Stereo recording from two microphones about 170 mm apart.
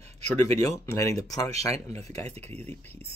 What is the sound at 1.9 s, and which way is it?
Speech, 20° left (ahead or behind).